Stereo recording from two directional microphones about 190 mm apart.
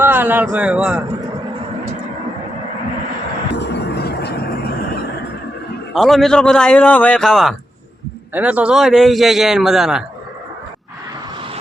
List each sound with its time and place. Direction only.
0.0 s a man's voice: 10° right (ahead or behind)
3.6 s vehicle: 65° left (ahead or behind)
5.9 s a man's voice: centre (ahead or behind)